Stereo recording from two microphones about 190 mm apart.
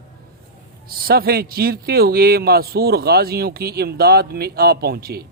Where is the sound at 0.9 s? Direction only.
55° right (ahead or behind).